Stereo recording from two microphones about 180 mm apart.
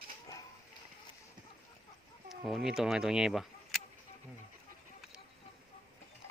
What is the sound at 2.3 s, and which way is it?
Speech, centre (ahead or behind).